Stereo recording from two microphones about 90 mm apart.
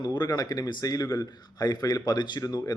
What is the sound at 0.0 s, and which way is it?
A man's voice, 50° left (ahead or behind).